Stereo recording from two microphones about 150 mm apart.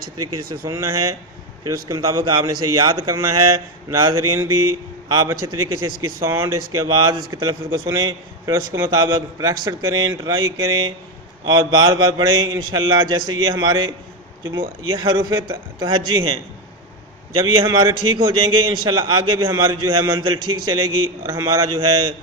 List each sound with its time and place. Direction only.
0.6 s a man's voice: 20° right (ahead or behind)
14.9 s a man's voice: 30° right (ahead or behind)
17.4 s a man's voice: 30° right (ahead or behind)